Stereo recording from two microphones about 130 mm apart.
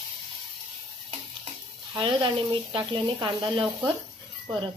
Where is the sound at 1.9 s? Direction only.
40° right (ahead or behind).